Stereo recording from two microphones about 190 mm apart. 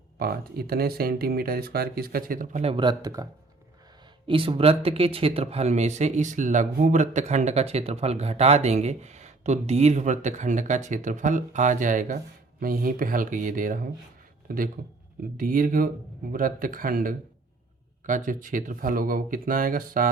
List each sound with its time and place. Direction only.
0.2 s speech: 55° right (ahead or behind); by 3.2 s 20° right (ahead or behind)
4.3 s speech: 30° right (ahead or behind); by 20.1 s 45° right (ahead or behind)